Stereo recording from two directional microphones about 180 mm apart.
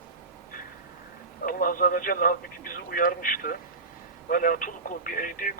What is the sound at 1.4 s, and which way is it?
Speech, 50° left (ahead or behind).